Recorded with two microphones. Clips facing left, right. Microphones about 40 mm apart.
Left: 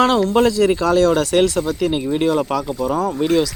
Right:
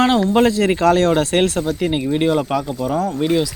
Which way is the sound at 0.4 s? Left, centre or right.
Right.